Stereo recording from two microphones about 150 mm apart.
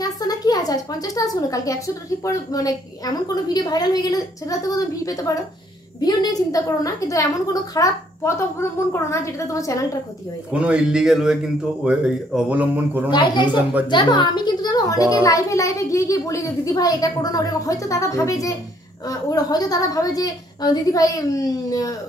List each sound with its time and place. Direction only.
0.0 s a woman's voice: 25° left (ahead or behind)
10.5 s speech: 10° right (ahead or behind)
13.1 s a woman's voice: 30° left (ahead or behind)